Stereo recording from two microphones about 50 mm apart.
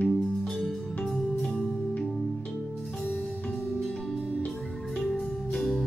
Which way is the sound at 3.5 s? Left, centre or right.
Left.